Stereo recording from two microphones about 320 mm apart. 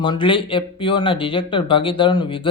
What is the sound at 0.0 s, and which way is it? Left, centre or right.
Speech, centre.